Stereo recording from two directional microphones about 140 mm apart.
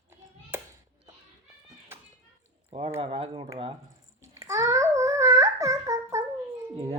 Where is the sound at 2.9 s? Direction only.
40° right (ahead or behind).